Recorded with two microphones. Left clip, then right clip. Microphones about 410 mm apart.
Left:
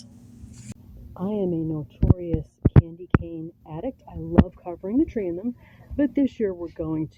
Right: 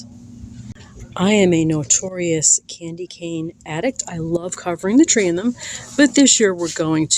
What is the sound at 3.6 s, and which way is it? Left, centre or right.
Speech, left.